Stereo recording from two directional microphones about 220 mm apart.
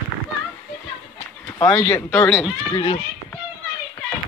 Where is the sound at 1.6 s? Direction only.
10° left (ahead or behind).